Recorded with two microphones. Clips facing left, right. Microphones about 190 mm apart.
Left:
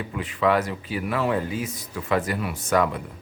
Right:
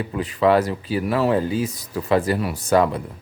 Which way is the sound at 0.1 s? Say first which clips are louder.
Right 5 dB; 35° right (ahead or behind).